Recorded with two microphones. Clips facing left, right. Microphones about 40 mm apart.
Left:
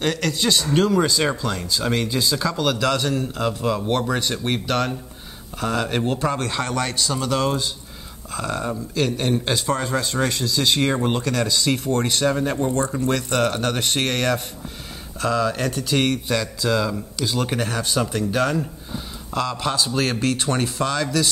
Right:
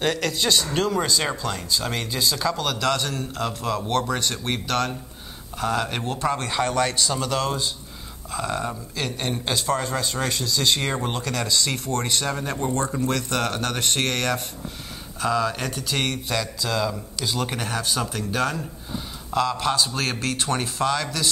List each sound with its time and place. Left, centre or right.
0.0 s a man's voice: centre